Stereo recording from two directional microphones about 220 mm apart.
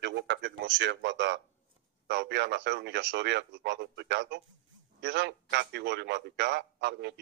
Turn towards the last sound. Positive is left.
turn(degrees=-50)  # may be behind; listen again after turning